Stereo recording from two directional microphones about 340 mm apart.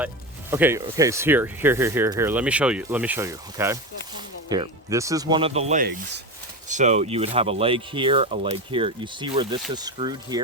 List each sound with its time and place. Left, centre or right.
0.5 s speech: centre